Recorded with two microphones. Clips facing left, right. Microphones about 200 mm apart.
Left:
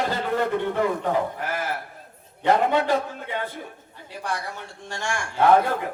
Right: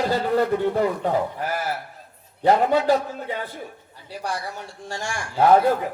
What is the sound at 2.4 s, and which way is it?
Speech, 40° right (ahead or behind).